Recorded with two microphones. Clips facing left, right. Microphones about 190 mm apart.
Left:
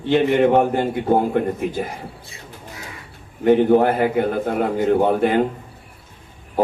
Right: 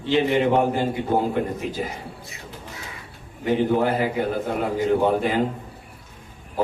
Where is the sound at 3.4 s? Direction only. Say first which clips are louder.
Left 6 dB; 55° left (ahead or behind).